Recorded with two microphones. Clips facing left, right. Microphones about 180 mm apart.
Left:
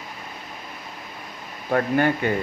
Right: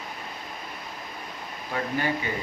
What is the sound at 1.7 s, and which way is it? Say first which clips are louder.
Speech: left 8 dB; 55° left (ahead or behind).